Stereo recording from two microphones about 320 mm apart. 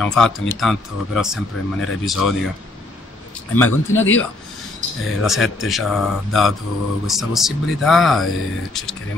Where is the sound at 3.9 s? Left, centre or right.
Left.